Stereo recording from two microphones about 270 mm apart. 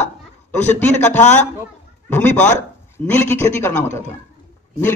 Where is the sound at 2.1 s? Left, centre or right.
Centre.